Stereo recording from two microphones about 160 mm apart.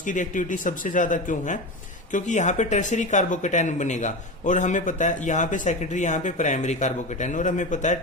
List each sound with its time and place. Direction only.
0.0 s speech: 50° left (ahead or behind)